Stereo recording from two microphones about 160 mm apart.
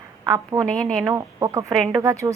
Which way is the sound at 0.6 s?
5° left (ahead or behind).